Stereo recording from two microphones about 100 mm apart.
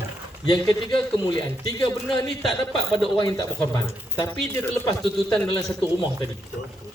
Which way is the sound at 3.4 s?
35° left (ahead or behind).